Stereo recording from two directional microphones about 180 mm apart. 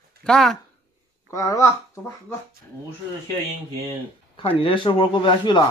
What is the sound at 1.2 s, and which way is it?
Speech, 20° left (ahead or behind).